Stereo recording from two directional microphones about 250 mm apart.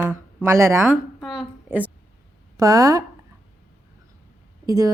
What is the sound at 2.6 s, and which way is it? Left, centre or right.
Speech, centre.